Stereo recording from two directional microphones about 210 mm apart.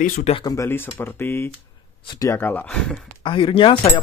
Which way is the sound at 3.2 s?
25° left (ahead or behind).